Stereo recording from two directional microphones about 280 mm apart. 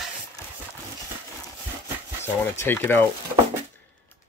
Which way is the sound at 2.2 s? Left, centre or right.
Centre.